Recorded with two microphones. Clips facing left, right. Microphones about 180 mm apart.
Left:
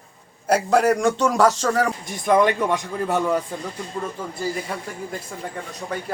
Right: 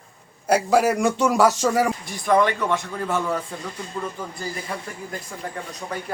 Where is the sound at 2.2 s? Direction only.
20° left (ahead or behind).